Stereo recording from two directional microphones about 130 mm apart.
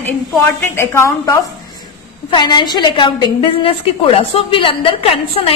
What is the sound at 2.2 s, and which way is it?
A woman's voice, 35° left (ahead or behind).